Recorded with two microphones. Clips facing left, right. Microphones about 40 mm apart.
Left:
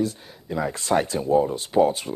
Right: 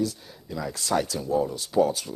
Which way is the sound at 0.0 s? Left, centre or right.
Left.